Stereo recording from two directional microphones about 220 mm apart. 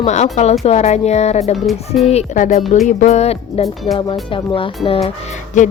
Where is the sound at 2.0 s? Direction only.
30° left (ahead or behind).